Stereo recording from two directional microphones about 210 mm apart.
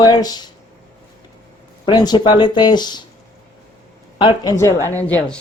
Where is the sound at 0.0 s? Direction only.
20° left (ahead or behind).